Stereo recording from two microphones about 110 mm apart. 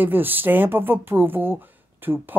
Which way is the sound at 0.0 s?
15° right (ahead or behind).